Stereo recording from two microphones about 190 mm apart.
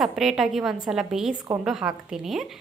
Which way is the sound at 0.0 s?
Centre (ahead or behind).